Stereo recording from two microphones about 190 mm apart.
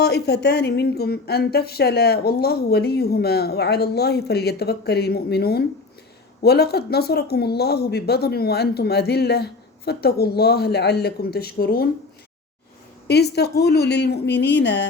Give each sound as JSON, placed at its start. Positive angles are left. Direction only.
{"t": 0.0, "sound": "a woman's voice", "side_deg": 60}
{"t": 13.1, "sound": "a woman's voice", "side_deg": 60}